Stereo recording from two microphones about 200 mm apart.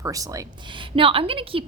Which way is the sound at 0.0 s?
15° right (ahead or behind).